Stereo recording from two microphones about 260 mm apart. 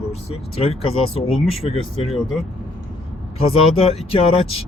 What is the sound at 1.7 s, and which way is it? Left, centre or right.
Speech, left.